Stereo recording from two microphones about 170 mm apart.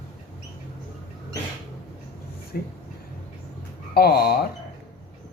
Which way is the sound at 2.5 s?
60° left (ahead or behind).